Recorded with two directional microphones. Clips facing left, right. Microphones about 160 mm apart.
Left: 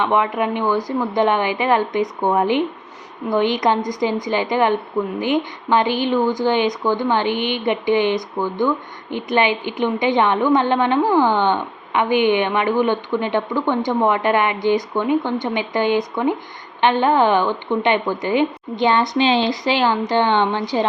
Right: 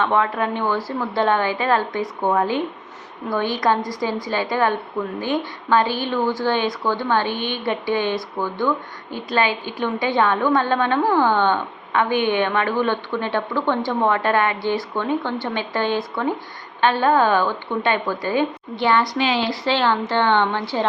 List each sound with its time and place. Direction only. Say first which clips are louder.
0.0 s a woman's voice: left 2 dB; 15° left (ahead or behind)